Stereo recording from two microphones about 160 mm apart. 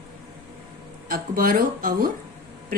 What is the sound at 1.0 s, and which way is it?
Speech, 65° right (ahead or behind).